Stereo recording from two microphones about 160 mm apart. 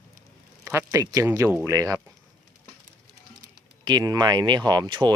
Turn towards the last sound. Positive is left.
turn(degrees=-25)  # may be behind; listen again after turning